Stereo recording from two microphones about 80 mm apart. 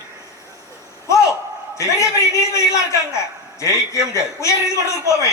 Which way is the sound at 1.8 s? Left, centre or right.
Left.